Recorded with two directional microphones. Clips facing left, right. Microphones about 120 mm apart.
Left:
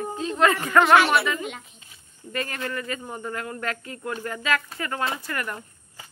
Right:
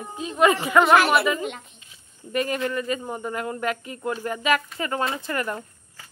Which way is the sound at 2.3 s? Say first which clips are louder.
Right 5 dB; 20° right (ahead or behind).